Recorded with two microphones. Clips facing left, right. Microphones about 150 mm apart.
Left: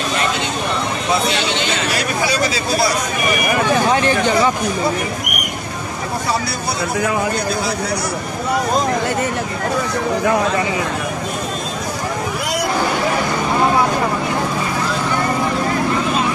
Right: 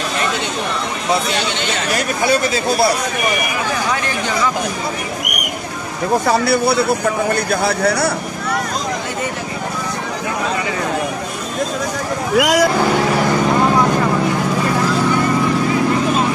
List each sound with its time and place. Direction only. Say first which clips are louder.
2.2 s speech: right 6 dB; 55° right (ahead or behind)
6.4 s a man's voice: right 8 dB; 65° right (ahead or behind)
12.4 s speech: right 8 dB; 90° right